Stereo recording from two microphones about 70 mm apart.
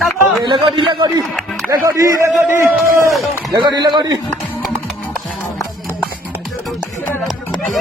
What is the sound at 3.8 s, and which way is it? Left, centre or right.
Speech, right.